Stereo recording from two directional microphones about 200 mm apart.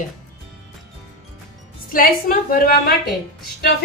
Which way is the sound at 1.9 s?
45° left (ahead or behind).